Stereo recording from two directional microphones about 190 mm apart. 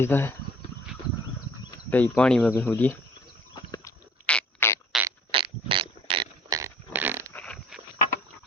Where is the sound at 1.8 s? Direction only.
10° left (ahead or behind).